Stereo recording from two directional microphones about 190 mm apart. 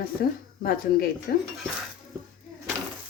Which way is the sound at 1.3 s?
50° left (ahead or behind).